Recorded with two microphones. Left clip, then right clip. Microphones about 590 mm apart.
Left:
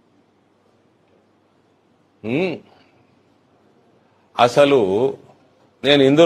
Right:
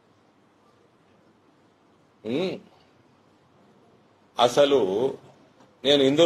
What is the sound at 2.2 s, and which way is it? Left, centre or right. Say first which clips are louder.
Speech: left 6 dB; left.